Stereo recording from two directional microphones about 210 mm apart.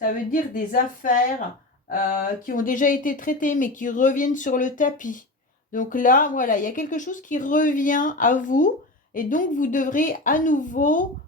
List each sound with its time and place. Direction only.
0.0 s speech: 40° left (ahead or behind)